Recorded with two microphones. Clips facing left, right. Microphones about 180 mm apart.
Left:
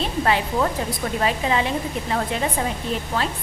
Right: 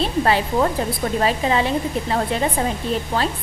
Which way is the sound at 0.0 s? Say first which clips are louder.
Right 3 dB; 35° right (ahead or behind).